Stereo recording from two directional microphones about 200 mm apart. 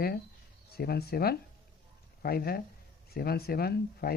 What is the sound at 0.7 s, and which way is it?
Speech, 50° left (ahead or behind).